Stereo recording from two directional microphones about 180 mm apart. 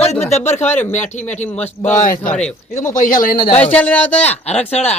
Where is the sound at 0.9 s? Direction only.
40° left (ahead or behind).